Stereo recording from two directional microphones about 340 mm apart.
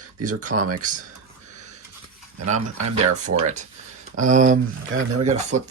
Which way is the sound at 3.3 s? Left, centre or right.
Right.